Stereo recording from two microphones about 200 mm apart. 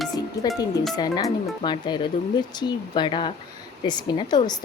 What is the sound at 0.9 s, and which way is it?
Speech, 20° left (ahead or behind).